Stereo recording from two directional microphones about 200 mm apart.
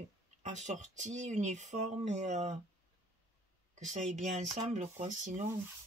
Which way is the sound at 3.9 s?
35° right (ahead or behind).